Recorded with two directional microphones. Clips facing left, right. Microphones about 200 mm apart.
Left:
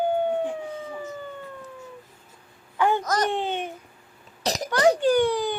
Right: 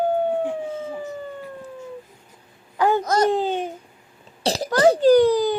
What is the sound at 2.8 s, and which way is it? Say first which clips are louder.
Babbling: right 4 dB; 35° right (ahead or behind).